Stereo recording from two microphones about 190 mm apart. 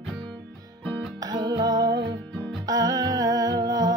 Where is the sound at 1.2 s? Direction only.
20° right (ahead or behind).